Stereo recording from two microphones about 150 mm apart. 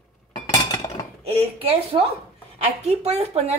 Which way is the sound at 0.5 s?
25° left (ahead or behind).